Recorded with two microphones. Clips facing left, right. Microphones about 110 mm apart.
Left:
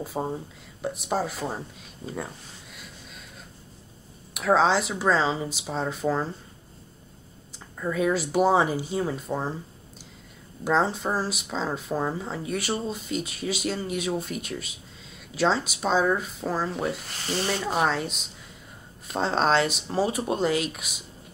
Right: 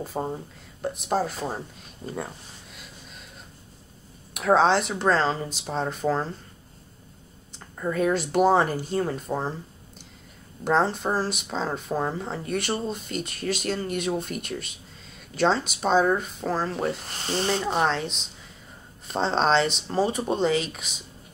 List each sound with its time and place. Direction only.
0.0 s speech: 5° left (ahead or behind)
4.3 s speech: centre (ahead or behind)
7.8 s speech: centre (ahead or behind)
10.8 s speech: 5° left (ahead or behind)
17.3 s speech: 25° right (ahead or behind)
17.6 s speech: 5° left (ahead or behind)